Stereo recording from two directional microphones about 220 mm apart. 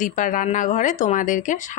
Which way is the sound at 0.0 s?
35° left (ahead or behind).